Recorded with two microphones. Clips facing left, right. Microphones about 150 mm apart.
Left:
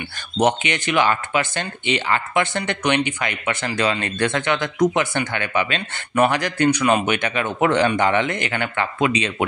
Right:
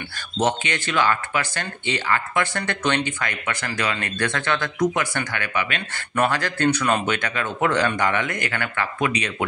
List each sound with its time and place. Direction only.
0.4 s speech: 15° left (ahead or behind)